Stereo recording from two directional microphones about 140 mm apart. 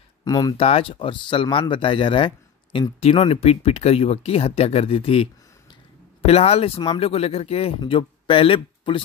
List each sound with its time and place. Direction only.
0.2 s speech: 25° left (ahead or behind)
0.6 s speech: 45° left (ahead or behind)